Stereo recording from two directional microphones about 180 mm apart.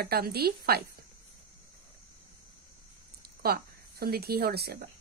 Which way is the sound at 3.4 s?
60° right (ahead or behind).